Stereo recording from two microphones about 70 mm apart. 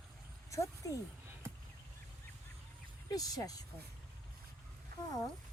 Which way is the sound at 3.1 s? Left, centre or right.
Left.